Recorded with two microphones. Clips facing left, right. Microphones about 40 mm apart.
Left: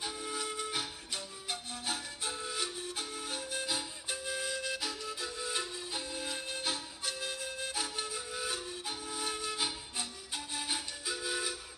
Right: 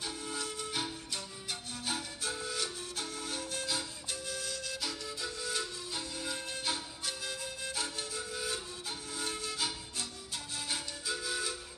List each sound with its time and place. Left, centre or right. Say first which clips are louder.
0.0 s music: left 1 dB; centre